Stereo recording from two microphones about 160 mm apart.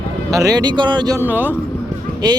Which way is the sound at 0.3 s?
20° right (ahead or behind).